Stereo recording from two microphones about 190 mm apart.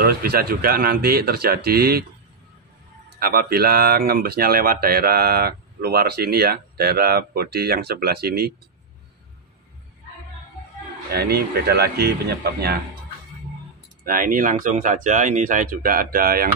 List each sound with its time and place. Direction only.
0.0 s speech: 55° right (ahead or behind)
3.2 s speech: 55° right (ahead or behind)
11.1 s speech: 55° right (ahead or behind)
14.0 s speech: 45° right (ahead or behind)